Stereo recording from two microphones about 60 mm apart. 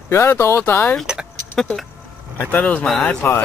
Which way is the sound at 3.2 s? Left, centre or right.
Left.